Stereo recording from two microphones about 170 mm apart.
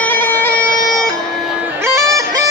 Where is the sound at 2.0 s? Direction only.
20° right (ahead or behind).